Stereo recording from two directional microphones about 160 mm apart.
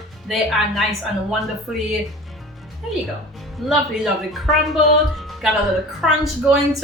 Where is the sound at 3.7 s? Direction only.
Centre (ahead or behind).